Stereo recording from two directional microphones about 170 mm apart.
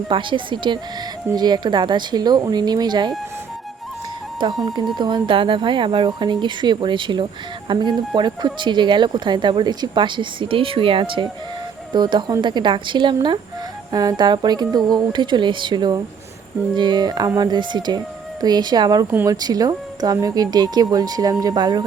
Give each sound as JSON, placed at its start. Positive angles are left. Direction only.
{"t": 0.1, "sound": "speech", "side_deg": -30}
{"t": 4.4, "sound": "speech", "side_deg": -25}